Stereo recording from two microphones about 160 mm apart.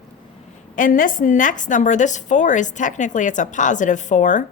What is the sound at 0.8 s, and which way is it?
A woman's voice, 55° left (ahead or behind).